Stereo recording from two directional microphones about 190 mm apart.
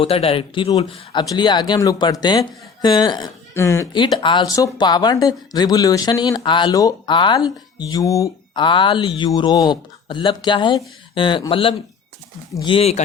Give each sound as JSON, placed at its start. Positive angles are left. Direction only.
{"t": 0.0, "sound": "a woman's voice", "side_deg": 30}
{"t": 4.0, "sound": "a woman's voice", "side_deg": 25}